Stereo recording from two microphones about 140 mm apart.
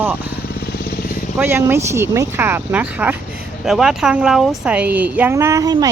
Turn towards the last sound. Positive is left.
turn(degrees=-25)  # may be behind; listen again after turning